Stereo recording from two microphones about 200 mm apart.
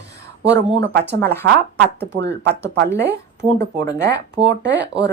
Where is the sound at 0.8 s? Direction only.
55° right (ahead or behind).